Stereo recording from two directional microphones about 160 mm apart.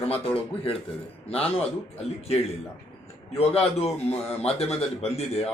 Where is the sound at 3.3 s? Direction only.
40° left (ahead or behind).